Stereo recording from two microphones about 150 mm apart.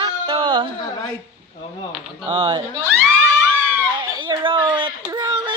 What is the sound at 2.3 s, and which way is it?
Speech, 30° right (ahead or behind).